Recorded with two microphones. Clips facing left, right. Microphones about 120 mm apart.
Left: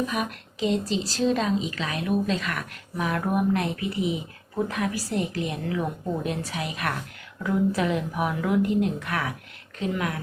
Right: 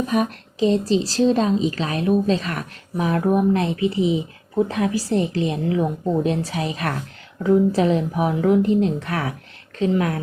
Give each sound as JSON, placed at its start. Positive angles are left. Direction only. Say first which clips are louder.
{"t": 0.1, "sound": "a woman's voice", "louder": "right 8 dB", "side_deg": -40}